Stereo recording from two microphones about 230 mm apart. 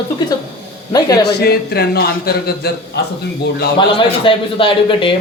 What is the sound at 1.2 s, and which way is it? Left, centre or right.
Speech, left.